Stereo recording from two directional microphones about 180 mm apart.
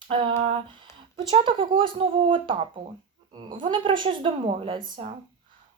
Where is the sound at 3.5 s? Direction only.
25° right (ahead or behind).